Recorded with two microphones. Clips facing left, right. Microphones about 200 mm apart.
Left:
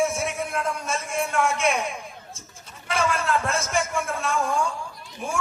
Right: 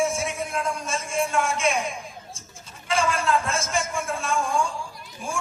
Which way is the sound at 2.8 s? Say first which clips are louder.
Right 1 dB; 60° left (ahead or behind).